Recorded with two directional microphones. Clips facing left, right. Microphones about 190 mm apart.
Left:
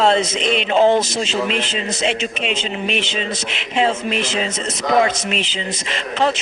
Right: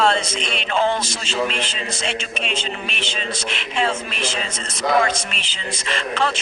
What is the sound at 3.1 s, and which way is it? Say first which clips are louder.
Speech: left 3 dB; 50° right (ahead or behind).